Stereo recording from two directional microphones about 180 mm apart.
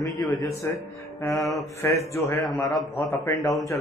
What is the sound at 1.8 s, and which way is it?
Speech, 15° left (ahead or behind).